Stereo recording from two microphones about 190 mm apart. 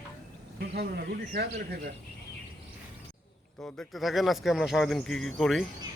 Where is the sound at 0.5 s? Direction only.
55° right (ahead or behind).